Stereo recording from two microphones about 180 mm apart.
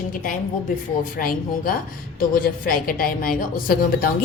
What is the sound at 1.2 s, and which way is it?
A woman's voice, 55° left (ahead or behind).